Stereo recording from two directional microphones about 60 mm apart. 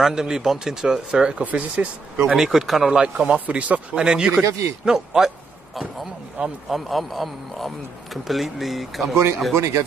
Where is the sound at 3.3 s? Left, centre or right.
Right.